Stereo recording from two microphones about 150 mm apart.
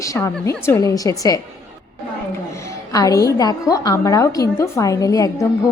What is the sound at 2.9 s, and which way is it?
A woman's voice, 25° left (ahead or behind).